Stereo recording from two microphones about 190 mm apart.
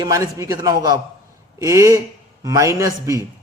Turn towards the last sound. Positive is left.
turn(degrees=-15)  # may be behind; listen again after turning